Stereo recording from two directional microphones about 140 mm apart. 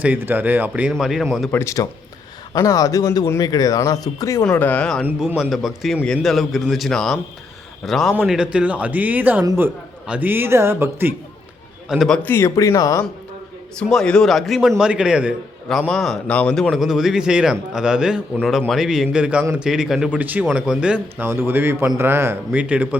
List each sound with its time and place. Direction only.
0.0 s a man's voice: 15° right (ahead or behind)
1.5 s a man's voice: 20° left (ahead or behind)
4.5 s speech: 10° left (ahead or behind)
5.0 s a man's voice: 5° right (ahead or behind)
11.9 s a man's voice: centre (ahead or behind); by 13.1 s 25° left (ahead or behind)
13.8 s a man's voice: 5° left (ahead or behind)